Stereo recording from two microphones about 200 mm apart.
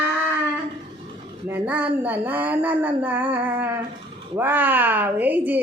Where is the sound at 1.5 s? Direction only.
10° right (ahead or behind).